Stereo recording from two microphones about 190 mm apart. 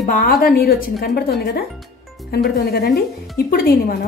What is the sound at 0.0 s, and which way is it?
Speech, 45° left (ahead or behind).